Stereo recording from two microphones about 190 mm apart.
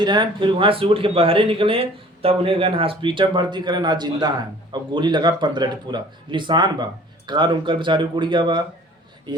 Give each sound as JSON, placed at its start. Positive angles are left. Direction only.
{"t": 0.0, "sound": "speech", "side_deg": -25}